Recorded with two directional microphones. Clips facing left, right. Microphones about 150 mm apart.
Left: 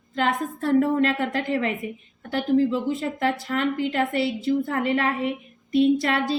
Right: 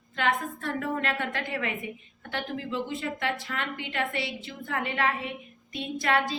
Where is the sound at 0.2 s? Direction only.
35° left (ahead or behind).